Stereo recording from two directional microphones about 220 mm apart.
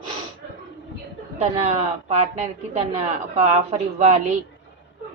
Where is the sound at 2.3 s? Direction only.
30° right (ahead or behind).